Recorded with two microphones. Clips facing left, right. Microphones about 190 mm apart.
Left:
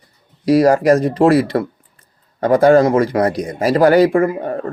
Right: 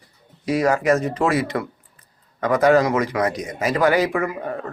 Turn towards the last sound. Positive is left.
turn(degrees=35)  # may be behind; listen again after turning